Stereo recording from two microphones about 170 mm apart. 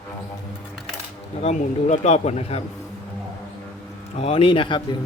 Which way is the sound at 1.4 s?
40° left (ahead or behind).